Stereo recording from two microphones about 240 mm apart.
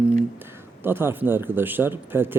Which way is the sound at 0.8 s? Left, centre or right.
Centre.